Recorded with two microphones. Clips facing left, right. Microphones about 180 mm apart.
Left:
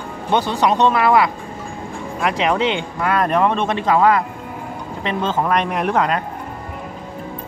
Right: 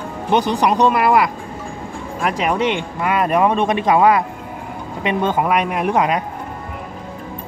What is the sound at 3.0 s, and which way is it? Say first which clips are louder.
Speech: right 1 dB; 10° right (ahead or behind).